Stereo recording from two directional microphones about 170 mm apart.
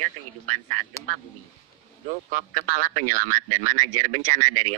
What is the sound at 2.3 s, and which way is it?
Speech, 45° right (ahead or behind).